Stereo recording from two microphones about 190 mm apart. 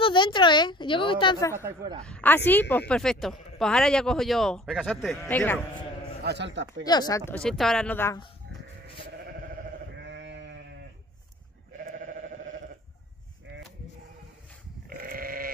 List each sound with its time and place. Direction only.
0.0 s a woman's voice: 25° left (ahead or behind)
2.0 s speech: 10° left (ahead or behind)
6.2 s a man's voice: 65° right (ahead or behind)
6.8 s speech: 20° left (ahead or behind)
10.0 s sheep: 70° right (ahead or behind)
11.8 s sheep: 45° right (ahead or behind)
14.9 s sheep: 50° right (ahead or behind)